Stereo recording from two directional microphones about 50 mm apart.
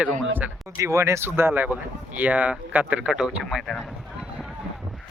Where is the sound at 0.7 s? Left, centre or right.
Right.